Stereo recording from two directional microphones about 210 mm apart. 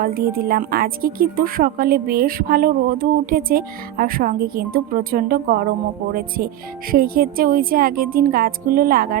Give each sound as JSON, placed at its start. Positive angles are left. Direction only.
{"t": 0.0, "sound": "speech", "side_deg": -45}